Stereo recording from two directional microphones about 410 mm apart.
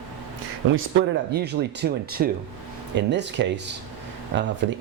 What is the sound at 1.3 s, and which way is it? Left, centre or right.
Speech, right.